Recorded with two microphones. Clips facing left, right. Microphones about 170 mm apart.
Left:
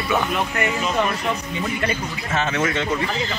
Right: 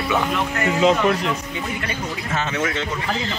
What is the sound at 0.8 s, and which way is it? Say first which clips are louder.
Speech: right 8 dB; 90° right.